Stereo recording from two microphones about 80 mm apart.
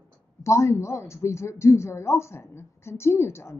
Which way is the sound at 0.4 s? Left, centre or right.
Left.